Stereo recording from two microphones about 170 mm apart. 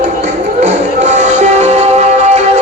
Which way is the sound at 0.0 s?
45° right (ahead or behind).